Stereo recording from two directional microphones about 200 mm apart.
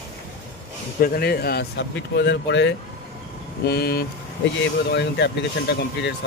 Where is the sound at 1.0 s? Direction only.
50° left (ahead or behind).